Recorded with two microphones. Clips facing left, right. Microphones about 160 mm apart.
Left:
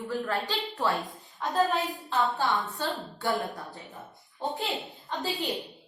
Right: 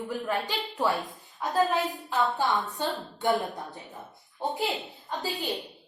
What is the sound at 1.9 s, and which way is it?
A woman's voice, 15° right (ahead or behind).